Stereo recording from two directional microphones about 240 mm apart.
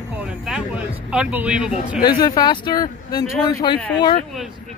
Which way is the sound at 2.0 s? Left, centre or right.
Centre.